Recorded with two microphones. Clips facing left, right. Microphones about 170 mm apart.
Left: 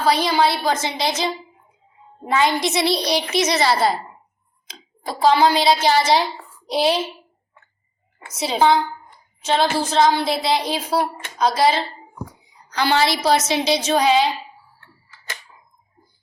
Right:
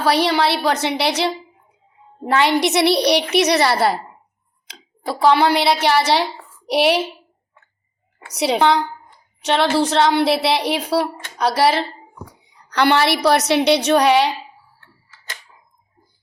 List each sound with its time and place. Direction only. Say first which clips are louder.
0.0 s a woman's voice: right 1 dB; 70° right (ahead or behind)
8.3 s a woman's voice: right 1 dB; 70° right (ahead or behind)